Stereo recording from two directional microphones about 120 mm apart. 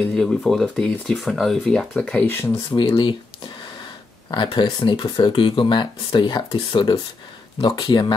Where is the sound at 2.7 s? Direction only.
40° left (ahead or behind).